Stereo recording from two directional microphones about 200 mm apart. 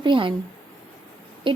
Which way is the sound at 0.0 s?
25° right (ahead or behind).